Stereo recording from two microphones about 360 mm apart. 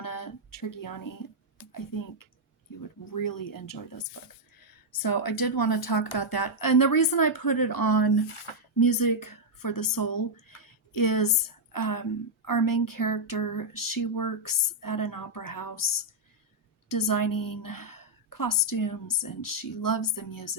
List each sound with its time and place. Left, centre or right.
0.0 s a sound: left
1.5 s a woman's voice: left
8.8 s a woman's voice: left